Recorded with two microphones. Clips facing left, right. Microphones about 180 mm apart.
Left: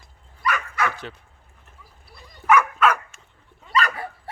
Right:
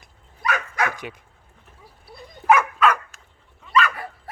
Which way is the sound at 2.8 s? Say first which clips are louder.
Even; centre (ahead or behind).